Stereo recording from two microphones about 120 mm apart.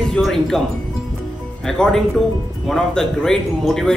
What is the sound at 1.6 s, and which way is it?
A man's voice, 5° left (ahead or behind).